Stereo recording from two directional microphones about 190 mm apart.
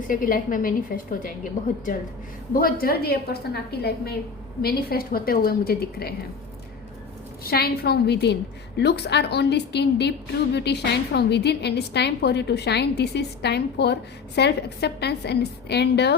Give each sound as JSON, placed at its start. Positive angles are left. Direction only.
{"t": 0.1, "sound": "a woman's voice", "side_deg": 45}
{"t": 2.5, "sound": "a woman's voice", "side_deg": 50}
{"t": 7.4, "sound": "a woman's voice", "side_deg": 55}